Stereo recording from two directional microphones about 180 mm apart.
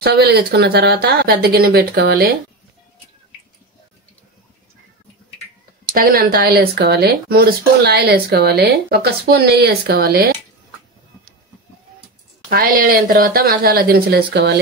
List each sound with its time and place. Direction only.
0.0 s speech: 60° right (ahead or behind)
5.9 s speech: 55° right (ahead or behind)
12.4 s speech: 50° right (ahead or behind); by 14.6 s 70° right (ahead or behind)